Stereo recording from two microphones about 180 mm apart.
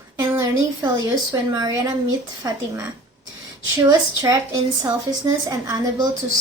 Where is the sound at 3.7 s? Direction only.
20° right (ahead or behind).